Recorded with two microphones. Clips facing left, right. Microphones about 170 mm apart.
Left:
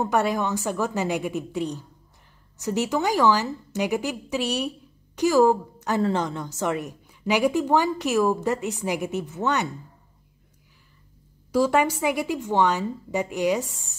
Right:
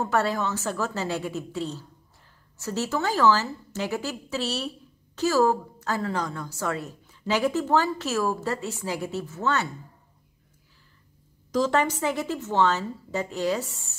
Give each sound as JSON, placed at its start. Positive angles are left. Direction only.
{"t": 0.0, "sound": "a woman's voice", "side_deg": 15}
{"t": 11.5, "sound": "a woman's voice", "side_deg": 10}